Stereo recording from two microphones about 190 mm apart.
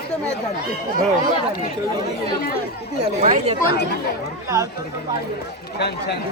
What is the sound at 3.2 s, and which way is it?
Speech, 40° right (ahead or behind).